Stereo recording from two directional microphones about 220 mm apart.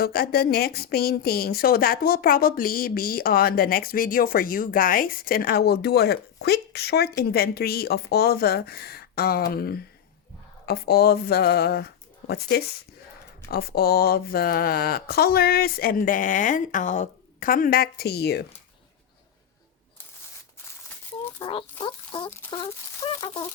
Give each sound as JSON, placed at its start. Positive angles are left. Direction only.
{"t": 0.0, "sound": "a woman's voice", "side_deg": 45}
{"t": 21.3, "sound": "speech", "side_deg": 20}
{"t": 22.3, "sound": "speech", "side_deg": 10}